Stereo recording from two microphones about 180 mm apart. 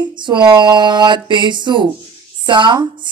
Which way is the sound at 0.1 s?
25° right (ahead or behind).